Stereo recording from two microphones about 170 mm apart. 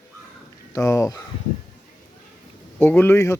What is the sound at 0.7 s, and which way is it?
Speech, 20° left (ahead or behind).